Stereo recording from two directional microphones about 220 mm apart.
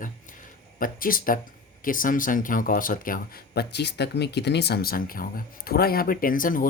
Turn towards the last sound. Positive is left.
turn(degrees=40)  # may be behind; listen again after turning